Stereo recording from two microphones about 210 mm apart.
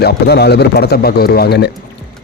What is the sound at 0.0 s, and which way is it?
Speech, 50° left (ahead or behind).